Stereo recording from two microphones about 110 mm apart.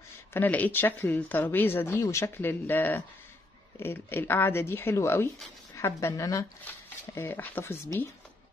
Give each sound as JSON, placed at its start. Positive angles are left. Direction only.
{"t": 0.3, "sound": "speech", "side_deg": 15}
{"t": 7.2, "sound": "speech", "side_deg": 20}